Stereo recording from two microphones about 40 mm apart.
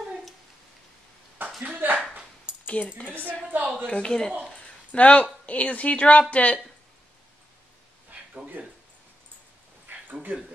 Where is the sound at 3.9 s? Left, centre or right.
Left.